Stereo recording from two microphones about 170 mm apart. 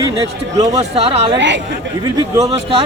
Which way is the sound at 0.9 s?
35° right (ahead or behind).